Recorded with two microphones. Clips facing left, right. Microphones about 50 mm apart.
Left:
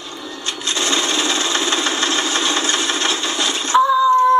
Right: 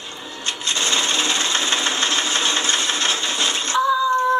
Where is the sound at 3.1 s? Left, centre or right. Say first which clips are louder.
Left 1 dB; right.